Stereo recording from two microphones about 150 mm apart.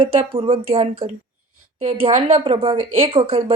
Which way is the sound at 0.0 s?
40° right (ahead or behind).